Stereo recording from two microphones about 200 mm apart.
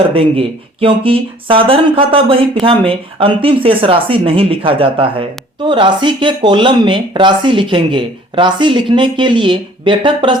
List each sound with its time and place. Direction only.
0.1 s speech: 30° right (ahead or behind)